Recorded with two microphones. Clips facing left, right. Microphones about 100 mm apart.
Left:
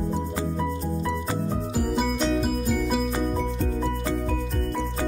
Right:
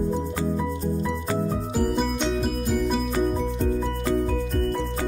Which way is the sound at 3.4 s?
5° right (ahead or behind).